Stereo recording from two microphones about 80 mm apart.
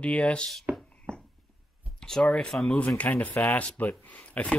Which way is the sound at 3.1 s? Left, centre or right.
Left.